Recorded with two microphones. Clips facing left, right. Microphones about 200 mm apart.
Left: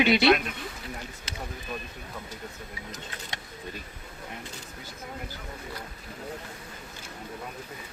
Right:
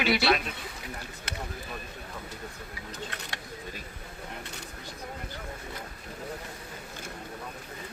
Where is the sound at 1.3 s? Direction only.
60° right (ahead or behind).